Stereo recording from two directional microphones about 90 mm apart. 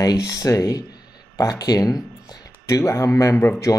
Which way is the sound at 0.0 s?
40° left (ahead or behind).